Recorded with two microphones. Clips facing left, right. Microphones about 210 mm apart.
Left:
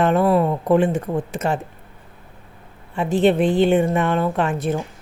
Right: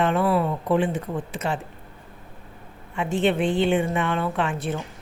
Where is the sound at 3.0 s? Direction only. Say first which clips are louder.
Left 5 dB; 35° left (ahead or behind).